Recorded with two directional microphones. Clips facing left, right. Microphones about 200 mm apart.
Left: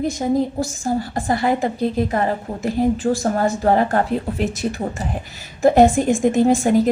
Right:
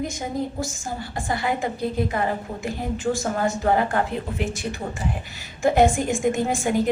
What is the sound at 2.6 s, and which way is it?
A woman's voice, 35° left (ahead or behind).